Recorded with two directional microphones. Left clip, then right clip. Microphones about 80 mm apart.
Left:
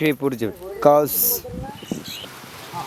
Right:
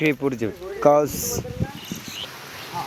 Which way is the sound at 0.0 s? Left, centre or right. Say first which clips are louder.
Left 1 dB; left.